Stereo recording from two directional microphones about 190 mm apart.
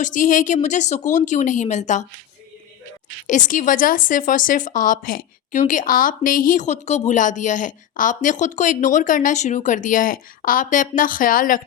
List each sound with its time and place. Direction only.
0.0 s speech: 45° left (ahead or behind)
3.2 s speech: 40° left (ahead or behind)